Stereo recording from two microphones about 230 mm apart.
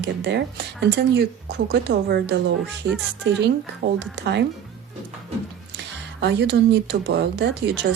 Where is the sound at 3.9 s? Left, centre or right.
Right.